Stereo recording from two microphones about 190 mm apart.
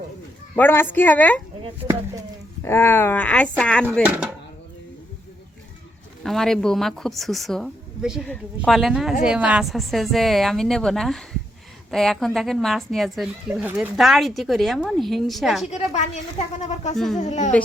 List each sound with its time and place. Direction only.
0.5 s speech: 10° left (ahead or behind)
2.6 s speech: 10° left (ahead or behind)
4.0 s speech: 5° right (ahead or behind)
6.2 s speech: centre (ahead or behind)
15.7 s speech: 35° left (ahead or behind)